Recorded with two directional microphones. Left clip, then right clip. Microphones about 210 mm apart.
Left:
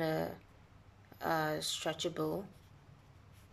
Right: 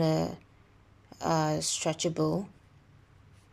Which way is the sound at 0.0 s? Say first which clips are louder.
Right 6 dB; 5° right (ahead or behind).